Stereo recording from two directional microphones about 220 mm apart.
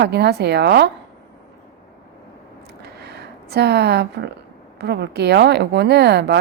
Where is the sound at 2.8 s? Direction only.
50° right (ahead or behind).